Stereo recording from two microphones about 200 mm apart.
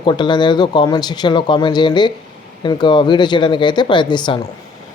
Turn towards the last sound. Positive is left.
turn(degrees=20)  # may be behind; listen again after turning